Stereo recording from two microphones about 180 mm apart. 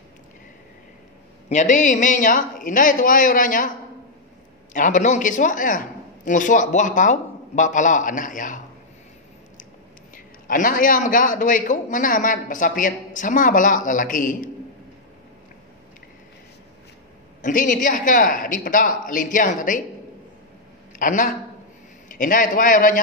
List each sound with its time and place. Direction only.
1.5 s a man's voice: 45° left (ahead or behind)
4.7 s a man's voice: 45° left (ahead or behind)
10.1 s a man's voice: 50° left (ahead or behind)
17.4 s a man's voice: 45° left (ahead or behind)
21.0 s a man's voice: 45° left (ahead or behind)